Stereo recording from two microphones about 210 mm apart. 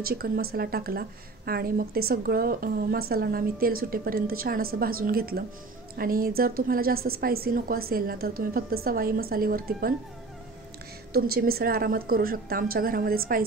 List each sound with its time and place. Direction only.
0.0 s a woman's voice: 45° right (ahead or behind)
11.1 s a woman's voice: 45° right (ahead or behind)